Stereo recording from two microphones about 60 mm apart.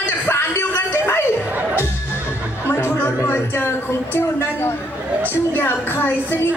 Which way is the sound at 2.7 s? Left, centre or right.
Left.